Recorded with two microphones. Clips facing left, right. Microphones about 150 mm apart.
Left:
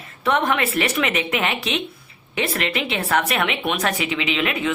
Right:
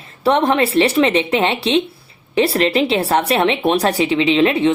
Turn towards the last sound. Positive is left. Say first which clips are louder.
# right 9 dB
turn(degrees=-30)  # may be behind; listen again after turning